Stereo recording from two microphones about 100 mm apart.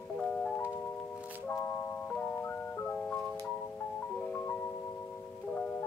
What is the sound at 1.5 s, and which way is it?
Music, 20° left (ahead or behind).